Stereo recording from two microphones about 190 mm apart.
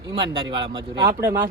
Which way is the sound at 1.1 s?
15° right (ahead or behind).